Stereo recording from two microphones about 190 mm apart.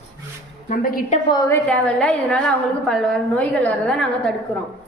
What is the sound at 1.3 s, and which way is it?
Speech, 15° left (ahead or behind).